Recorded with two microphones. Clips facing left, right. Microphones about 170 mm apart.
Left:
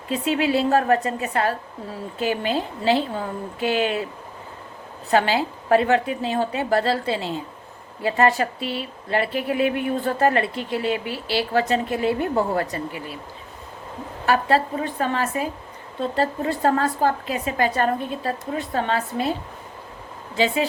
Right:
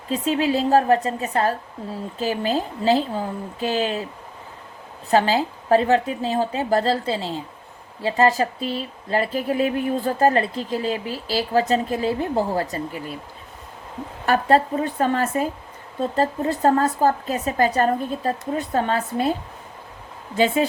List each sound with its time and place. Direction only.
0.1 s speech: 40° right (ahead or behind)
5.1 s speech: 40° right (ahead or behind)
14.3 s a woman's voice: 45° right (ahead or behind)
20.3 s a woman's voice: 45° right (ahead or behind)